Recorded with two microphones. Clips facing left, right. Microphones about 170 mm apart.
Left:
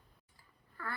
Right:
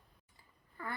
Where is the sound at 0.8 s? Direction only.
20° right (ahead or behind).